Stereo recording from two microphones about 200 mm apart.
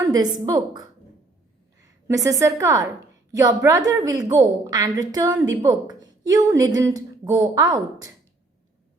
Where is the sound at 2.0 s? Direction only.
15° right (ahead or behind).